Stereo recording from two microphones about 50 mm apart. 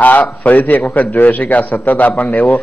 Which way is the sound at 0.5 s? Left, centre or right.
Left.